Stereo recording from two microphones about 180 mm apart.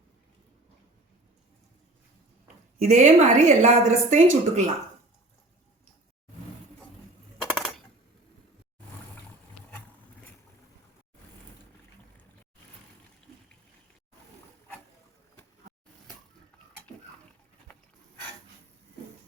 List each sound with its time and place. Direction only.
2.8 s a woman's voice: 40° right (ahead or behind)
7.5 s coin: centre (ahead or behind)